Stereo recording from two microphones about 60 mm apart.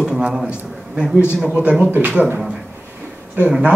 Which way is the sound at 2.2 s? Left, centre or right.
Centre.